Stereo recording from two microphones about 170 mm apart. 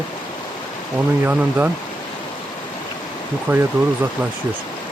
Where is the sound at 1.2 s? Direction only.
10° right (ahead or behind).